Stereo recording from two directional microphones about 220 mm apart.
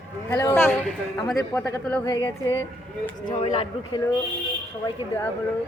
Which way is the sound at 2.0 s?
20° left (ahead or behind).